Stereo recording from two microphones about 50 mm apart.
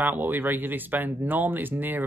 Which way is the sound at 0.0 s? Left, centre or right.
Right.